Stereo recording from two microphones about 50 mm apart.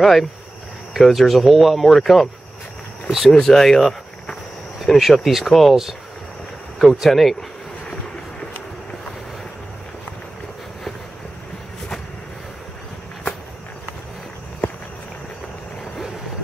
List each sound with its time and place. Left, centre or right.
0.0 s speech: centre
3.3 s speech: centre
6.8 s speech: centre